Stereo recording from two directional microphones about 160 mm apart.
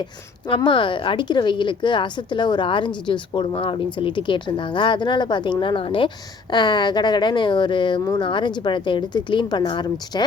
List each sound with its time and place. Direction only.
0.4 s a woman's voice: 30° left (ahead or behind)